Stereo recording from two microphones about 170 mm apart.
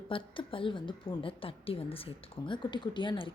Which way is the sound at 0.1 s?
30° left (ahead or behind).